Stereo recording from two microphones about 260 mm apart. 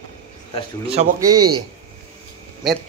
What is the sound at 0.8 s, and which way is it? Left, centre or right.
Speech, right.